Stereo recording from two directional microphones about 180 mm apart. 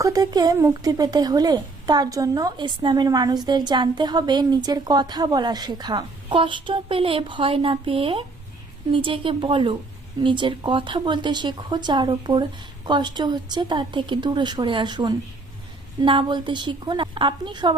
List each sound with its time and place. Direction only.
0.0 s speech: 20° right (ahead or behind)